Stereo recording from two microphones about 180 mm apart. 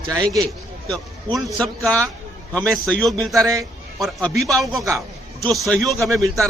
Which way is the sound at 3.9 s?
Centre (ahead or behind).